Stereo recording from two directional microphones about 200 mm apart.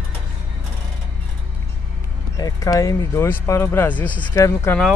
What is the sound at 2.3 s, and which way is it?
Speech, 15° left (ahead or behind).